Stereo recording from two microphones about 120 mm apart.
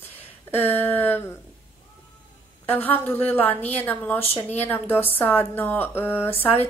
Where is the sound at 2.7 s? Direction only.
15° left (ahead or behind).